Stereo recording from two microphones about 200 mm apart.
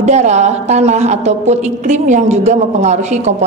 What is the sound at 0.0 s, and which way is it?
A woman's voice, 35° right (ahead or behind).